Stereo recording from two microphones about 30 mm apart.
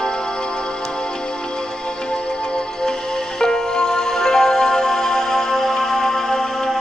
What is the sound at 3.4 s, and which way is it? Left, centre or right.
Music, left.